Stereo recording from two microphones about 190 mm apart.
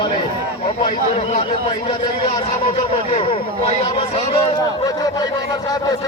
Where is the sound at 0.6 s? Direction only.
30° left (ahead or behind).